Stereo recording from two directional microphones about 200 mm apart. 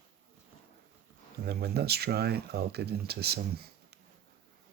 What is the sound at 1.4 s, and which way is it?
Speech, 55° right (ahead or behind).